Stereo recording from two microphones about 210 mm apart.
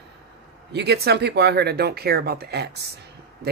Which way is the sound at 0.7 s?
50° right (ahead or behind).